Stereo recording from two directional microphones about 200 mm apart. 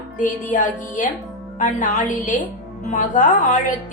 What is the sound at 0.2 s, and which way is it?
Music, 40° left (ahead or behind).